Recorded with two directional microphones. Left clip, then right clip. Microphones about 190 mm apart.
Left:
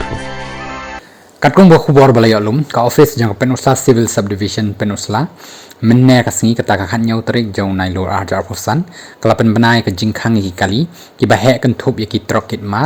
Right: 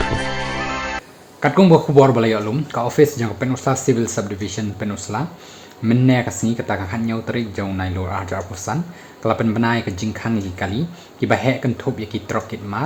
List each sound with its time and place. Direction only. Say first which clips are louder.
0.0 s music: right 1 dB; centre (ahead or behind)
1.4 s a man's voice: left 6 dB; 45° left (ahead or behind)